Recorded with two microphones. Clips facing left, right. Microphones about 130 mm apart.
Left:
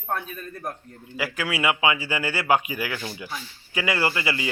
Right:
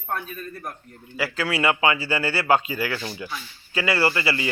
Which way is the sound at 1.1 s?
15° left (ahead or behind).